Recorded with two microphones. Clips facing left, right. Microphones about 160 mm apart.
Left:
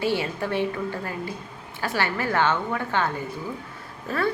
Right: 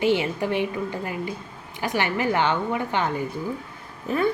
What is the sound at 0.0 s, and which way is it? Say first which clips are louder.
A woman's voice: right 3 dB; 15° right (ahead or behind).